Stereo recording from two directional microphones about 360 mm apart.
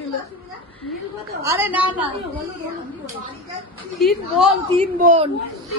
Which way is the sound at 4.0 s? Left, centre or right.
Centre.